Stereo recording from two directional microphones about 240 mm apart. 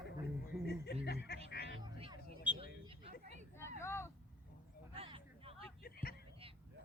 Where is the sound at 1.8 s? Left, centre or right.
Right.